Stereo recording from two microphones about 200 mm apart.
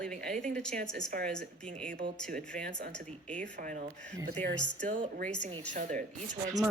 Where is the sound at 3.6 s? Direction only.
40° right (ahead or behind).